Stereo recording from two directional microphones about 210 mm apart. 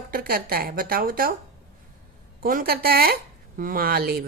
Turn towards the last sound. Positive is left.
turn(degrees=-45)  # may be behind; listen again after turning